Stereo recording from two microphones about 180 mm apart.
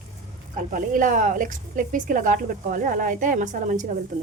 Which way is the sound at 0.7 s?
45° right (ahead or behind).